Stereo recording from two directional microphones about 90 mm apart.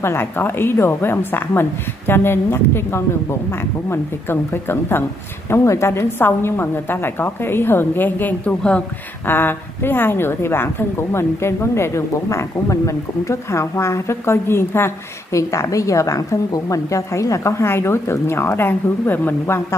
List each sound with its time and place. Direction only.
0.0 s a woman's voice: 25° left (ahead or behind)